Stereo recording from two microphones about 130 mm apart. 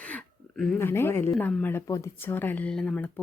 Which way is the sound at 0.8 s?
20° left (ahead or behind).